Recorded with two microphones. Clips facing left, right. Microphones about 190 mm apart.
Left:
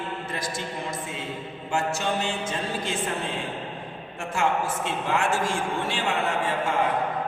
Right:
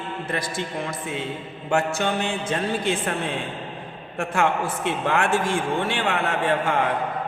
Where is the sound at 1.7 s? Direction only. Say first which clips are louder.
Right 4 dB; 60° right (ahead or behind).